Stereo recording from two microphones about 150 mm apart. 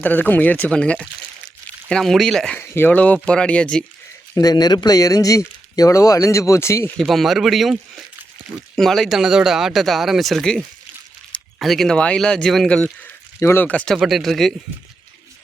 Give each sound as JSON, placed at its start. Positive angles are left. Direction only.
{"t": 0.0, "sound": "speech", "side_deg": 10}
{"t": 2.6, "sound": "speech", "side_deg": 15}
{"t": 4.4, "sound": "speech", "side_deg": 25}
{"t": 6.9, "sound": "speech", "side_deg": 0}
{"t": 11.6, "sound": "speech", "side_deg": 0}